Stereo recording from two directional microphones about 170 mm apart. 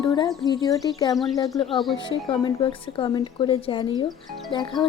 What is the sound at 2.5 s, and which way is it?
Speech, 30° left (ahead or behind).